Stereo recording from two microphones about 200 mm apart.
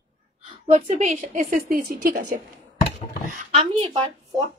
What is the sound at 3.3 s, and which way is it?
A woman's voice, 30° right (ahead or behind).